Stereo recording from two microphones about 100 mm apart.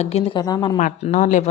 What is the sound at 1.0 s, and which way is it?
Speech, 80° left.